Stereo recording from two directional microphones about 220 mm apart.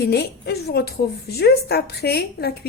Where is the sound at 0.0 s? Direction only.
50° left (ahead or behind).